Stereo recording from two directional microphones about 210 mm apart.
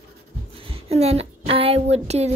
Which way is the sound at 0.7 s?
30° right (ahead or behind).